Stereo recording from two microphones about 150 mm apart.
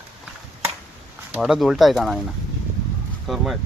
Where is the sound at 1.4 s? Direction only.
Centre (ahead or behind).